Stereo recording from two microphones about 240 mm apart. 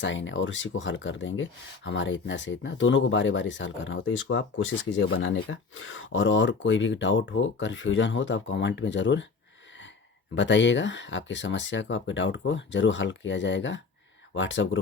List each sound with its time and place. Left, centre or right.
0.0 s speech: left
10.3 s speech: left